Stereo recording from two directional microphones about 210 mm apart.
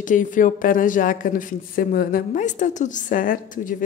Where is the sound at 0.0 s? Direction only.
40° left (ahead or behind).